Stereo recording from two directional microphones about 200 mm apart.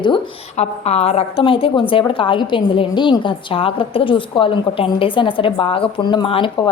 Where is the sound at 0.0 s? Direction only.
30° left (ahead or behind).